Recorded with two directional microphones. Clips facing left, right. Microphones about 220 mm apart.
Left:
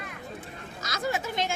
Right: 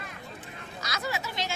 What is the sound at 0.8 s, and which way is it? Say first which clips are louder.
Speech: left 4 dB; 50° left (ahead or behind).